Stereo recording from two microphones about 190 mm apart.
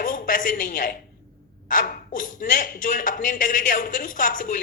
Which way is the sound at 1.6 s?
45° left (ahead or behind).